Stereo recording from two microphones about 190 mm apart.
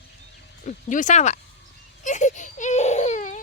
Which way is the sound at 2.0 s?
40° left (ahead or behind).